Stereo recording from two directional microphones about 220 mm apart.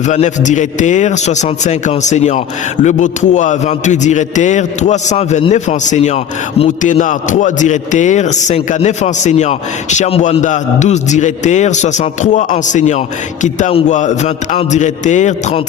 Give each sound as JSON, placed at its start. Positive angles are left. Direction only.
{"t": 0.1, "sound": "a man's voice", "side_deg": 35}